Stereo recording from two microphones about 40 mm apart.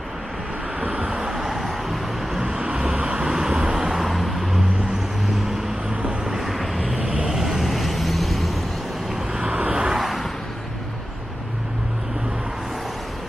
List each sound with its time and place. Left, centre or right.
0.7 s vehicle: right
1.3 s vehicle: centre
2.6 s vehicle: right; by 4.6 s centre
6.3 s vehicle: centre
7.0 s vehicle: right
7.2 s vehicle: centre
9.5 s vehicle: right
9.9 s vehicle: centre